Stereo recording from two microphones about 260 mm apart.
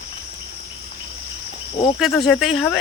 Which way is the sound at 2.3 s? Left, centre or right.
Centre.